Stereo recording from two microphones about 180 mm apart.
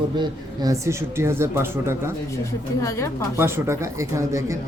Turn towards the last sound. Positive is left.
turn(degrees=-15)  # may be behind; listen again after turning